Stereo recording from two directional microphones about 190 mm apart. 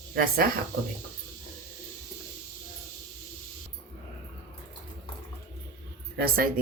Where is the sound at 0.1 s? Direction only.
50° right (ahead or behind).